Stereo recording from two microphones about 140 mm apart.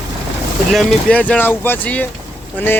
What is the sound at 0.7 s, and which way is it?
Speech, 10° left (ahead or behind).